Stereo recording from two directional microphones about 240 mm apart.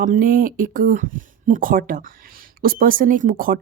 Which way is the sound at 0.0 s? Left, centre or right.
Right.